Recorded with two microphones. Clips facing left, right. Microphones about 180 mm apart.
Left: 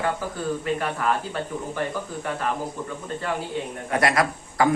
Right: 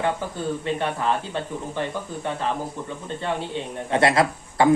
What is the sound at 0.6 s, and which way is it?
A man's voice, 25° right (ahead or behind).